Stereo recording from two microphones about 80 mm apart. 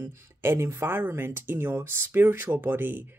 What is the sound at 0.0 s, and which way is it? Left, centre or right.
Speech, right.